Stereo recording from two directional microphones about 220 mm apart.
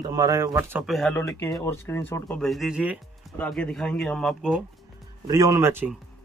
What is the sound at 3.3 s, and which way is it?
Speech, 5° left (ahead or behind).